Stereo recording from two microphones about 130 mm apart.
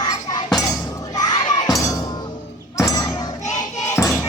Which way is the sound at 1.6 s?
25° left (ahead or behind).